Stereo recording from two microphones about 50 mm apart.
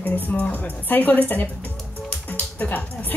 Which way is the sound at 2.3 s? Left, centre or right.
Left.